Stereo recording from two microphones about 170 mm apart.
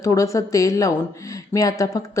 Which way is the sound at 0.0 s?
20° left (ahead or behind).